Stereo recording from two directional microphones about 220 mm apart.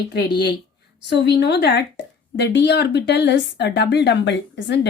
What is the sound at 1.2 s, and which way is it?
A woman's voice, 50° left (ahead or behind).